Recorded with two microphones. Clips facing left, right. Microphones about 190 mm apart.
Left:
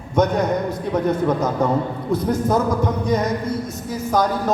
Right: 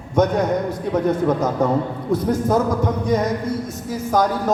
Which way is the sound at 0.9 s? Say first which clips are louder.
Right 1 dB; 50° right (ahead or behind).